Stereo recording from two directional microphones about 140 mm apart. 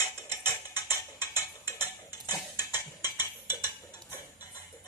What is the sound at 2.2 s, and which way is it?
Cutlery, 25° left (ahead or behind).